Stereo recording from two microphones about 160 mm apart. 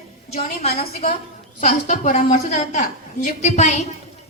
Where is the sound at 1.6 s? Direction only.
50° left (ahead or behind).